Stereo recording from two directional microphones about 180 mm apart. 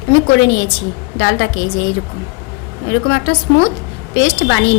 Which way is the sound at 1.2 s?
90° left.